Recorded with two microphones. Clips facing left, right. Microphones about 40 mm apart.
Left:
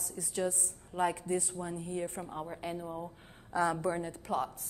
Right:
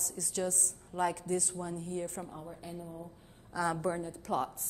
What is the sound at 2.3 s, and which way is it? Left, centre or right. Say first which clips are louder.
Speech: left 5 dB; left.